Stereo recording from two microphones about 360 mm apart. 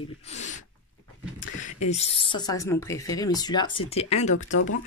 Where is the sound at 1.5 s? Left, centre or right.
Centre.